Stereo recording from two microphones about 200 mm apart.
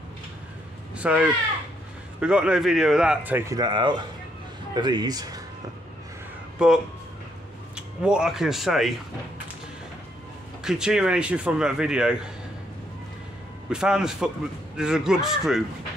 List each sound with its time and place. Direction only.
0.9 s a man's voice: 5° right (ahead or behind)
6.6 s speech: 5° right (ahead or behind)
10.6 s speech: 5° right (ahead or behind)
13.7 s speech: 5° right (ahead or behind)